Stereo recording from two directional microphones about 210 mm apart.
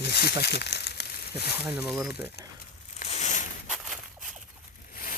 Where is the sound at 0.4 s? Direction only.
50° left (ahead or behind).